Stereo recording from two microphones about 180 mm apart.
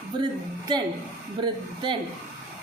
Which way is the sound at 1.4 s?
25° right (ahead or behind).